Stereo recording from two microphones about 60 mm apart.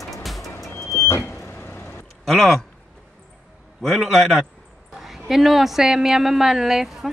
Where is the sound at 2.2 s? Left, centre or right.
Centre.